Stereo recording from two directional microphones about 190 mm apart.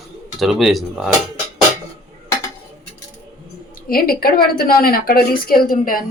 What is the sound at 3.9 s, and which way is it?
A woman's voice, 50° left (ahead or behind).